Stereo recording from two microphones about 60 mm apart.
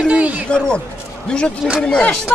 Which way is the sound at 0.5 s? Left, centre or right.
Centre.